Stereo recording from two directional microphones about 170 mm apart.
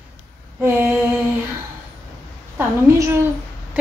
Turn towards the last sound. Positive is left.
turn(degrees=-15)  # may be behind; listen again after turning